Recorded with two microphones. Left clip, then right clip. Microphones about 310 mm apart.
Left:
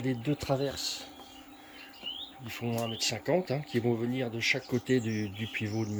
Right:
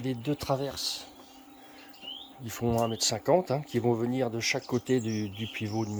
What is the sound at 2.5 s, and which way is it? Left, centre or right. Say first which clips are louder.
Speech: right 6 dB; right.